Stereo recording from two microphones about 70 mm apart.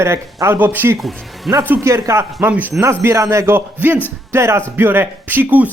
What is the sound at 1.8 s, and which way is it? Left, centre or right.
Speech, right.